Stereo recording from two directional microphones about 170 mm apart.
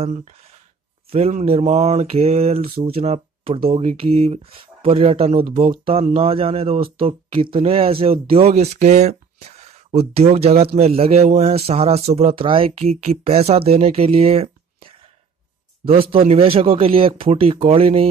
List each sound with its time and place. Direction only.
0.0 s speech: 40° right (ahead or behind)